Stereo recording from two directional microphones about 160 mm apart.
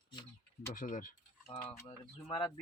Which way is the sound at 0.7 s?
55° left (ahead or behind).